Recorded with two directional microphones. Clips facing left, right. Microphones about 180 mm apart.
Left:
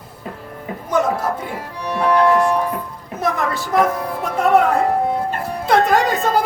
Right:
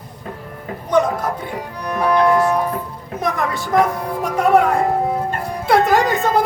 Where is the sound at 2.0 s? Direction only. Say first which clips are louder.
Even; 10° right (ahead or behind).